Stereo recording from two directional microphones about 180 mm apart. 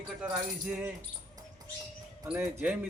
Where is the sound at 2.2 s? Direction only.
10° right (ahead or behind).